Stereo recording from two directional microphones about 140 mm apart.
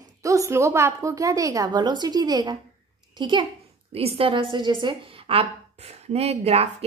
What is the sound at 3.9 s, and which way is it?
A woman's voice, 45° right (ahead or behind).